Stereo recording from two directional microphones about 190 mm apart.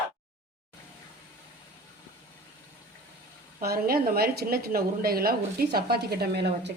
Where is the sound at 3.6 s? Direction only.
50° right (ahead or behind).